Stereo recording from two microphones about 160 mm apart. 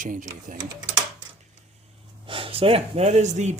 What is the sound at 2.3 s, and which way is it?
Speech, 35° right (ahead or behind).